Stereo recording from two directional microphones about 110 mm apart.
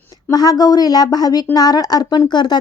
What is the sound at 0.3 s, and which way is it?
Speech, 35° left (ahead or behind).